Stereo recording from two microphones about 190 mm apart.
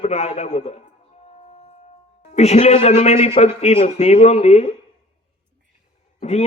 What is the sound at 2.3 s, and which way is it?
A man's voice, 35° left (ahead or behind).